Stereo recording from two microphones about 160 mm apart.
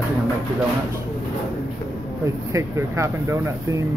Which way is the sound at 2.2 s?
20° right (ahead or behind).